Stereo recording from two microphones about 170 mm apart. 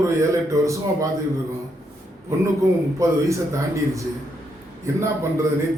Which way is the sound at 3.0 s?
15° right (ahead or behind).